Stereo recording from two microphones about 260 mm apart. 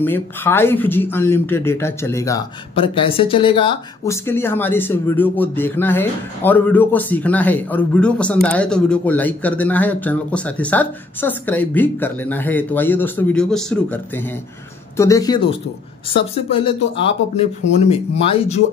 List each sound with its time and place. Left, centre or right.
0.0 s speech: centre